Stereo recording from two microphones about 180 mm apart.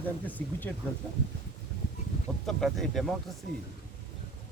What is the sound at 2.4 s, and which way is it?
Speech, centre (ahead or behind).